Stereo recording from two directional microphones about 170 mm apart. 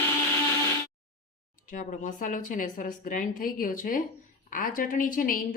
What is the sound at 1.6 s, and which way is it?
A woman's voice, 50° left (ahead or behind).